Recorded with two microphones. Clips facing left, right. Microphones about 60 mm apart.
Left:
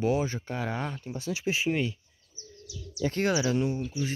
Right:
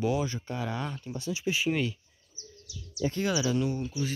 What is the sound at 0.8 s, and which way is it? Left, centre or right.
Speech, left.